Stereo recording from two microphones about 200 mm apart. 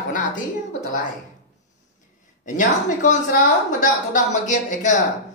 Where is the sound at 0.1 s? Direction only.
40° left (ahead or behind).